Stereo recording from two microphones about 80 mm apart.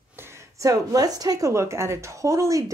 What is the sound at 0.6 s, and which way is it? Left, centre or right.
A woman's voice, right.